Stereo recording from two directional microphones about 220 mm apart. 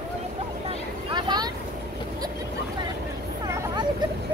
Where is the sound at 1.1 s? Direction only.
20° right (ahead or behind).